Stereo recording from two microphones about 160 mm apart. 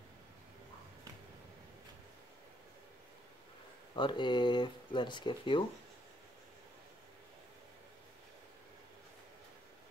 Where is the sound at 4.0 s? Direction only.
30° left (ahead or behind).